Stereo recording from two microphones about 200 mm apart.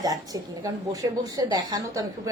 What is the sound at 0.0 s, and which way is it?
A woman's voice, 20° right (ahead or behind).